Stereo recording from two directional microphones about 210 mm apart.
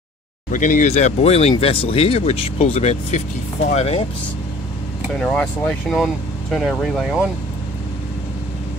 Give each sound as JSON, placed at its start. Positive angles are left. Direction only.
{"t": 0.5, "sound": "speech", "side_deg": 40}
{"t": 5.2, "sound": "speech", "side_deg": 5}